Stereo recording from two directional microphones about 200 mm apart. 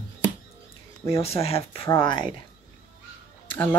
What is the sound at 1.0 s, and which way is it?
Speech, 30° left (ahead or behind).